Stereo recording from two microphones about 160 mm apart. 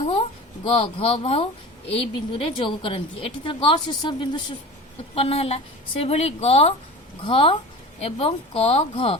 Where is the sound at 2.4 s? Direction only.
30° left (ahead or behind).